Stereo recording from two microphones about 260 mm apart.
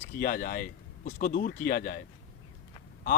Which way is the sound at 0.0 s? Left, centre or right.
Left.